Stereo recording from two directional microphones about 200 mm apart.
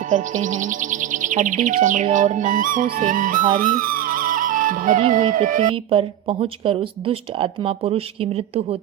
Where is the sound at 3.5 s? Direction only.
45° right (ahead or behind).